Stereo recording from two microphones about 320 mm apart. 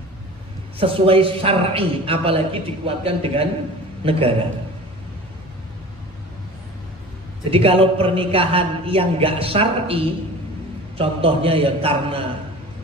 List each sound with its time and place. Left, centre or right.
0.7 s a man's voice: centre
7.5 s a man's voice: centre